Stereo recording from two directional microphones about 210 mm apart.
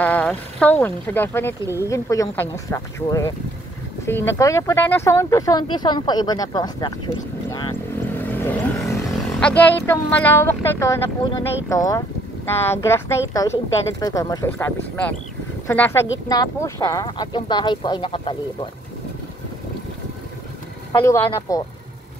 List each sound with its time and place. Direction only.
0.0 s speech: 5° left (ahead or behind)
7.4 s vehicle: 20° left (ahead or behind)
8.2 s vehicle: 10° left (ahead or behind)
9.4 s speech: 5° left (ahead or behind); by 18.7 s 25° left (ahead or behind)
21.0 s speech: 15° left (ahead or behind)